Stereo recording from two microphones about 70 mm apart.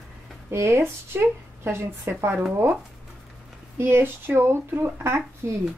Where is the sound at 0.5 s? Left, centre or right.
Right.